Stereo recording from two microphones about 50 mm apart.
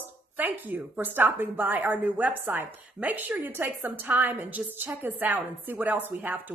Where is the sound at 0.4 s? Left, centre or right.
Right.